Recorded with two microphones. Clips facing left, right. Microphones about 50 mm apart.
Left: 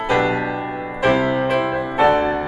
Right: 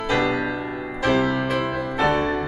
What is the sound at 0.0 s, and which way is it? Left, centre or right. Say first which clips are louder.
Music: left 3 dB; centre.